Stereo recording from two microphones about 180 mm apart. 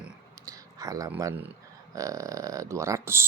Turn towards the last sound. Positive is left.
turn(degrees=-15)  # may be behind; listen again after turning